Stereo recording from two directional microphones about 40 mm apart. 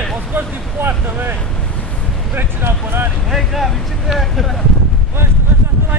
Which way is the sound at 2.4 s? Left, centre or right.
Right.